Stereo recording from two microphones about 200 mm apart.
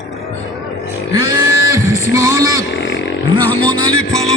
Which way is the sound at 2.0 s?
15° right (ahead or behind).